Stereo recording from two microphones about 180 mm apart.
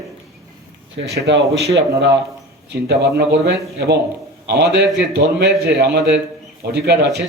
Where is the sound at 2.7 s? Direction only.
65° right (ahead or behind).